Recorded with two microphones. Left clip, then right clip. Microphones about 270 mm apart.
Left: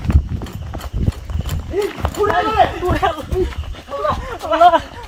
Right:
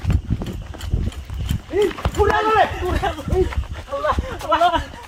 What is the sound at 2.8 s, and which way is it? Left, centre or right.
Speech, centre.